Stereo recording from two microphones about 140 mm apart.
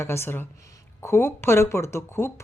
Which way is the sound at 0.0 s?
20° left (ahead or behind).